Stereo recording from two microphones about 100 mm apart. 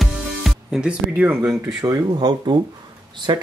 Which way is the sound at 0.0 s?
Centre (ahead or behind).